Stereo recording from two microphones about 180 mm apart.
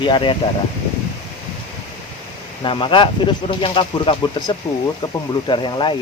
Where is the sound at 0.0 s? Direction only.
25° left (ahead or behind).